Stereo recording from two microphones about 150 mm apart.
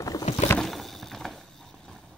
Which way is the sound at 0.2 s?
45° left (ahead or behind).